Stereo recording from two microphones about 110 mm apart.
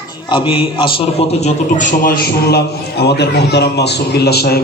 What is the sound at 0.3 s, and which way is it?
A man's voice, 50° left (ahead or behind).